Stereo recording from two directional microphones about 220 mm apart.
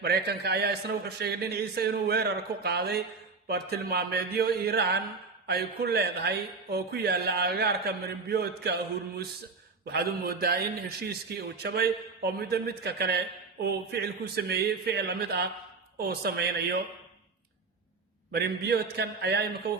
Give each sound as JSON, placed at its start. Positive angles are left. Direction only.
{"t": 0.0, "sound": "a man's voice", "side_deg": -45}
{"t": 18.3, "sound": "a man's voice", "side_deg": -45}